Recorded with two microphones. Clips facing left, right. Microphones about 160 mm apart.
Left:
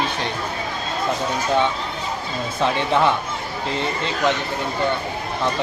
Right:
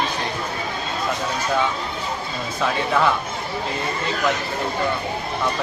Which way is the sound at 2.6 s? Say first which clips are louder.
Left 2 dB; 25° left (ahead or behind).